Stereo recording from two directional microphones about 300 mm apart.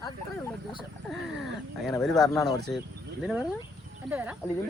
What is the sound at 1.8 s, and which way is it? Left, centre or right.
Speech, centre.